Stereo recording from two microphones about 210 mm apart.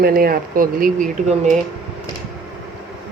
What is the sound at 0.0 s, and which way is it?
Speech, 45° right (ahead or behind).